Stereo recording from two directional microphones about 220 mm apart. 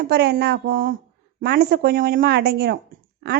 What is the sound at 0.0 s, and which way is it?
A woman's voice, 50° right (ahead or behind).